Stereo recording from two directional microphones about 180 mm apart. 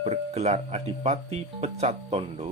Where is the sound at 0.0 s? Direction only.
35° right (ahead or behind).